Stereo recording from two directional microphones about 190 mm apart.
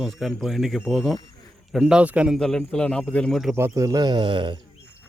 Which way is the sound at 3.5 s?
15° right (ahead or behind).